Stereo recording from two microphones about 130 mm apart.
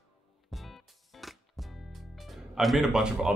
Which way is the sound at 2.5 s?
Centre (ahead or behind).